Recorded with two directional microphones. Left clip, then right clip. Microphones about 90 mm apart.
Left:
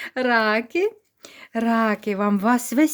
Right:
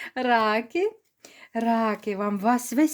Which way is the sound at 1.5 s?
45° left (ahead or behind).